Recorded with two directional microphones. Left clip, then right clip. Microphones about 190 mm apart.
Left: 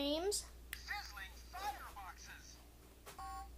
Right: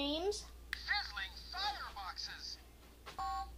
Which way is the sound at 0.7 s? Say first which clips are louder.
Right 10 dB; centre (ahead or behind).